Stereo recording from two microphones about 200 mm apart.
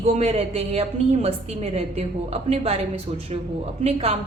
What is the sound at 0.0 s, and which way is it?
A woman's voice, 35° right (ahead or behind).